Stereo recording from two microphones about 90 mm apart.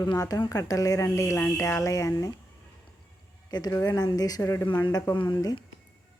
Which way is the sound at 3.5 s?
50° left (ahead or behind).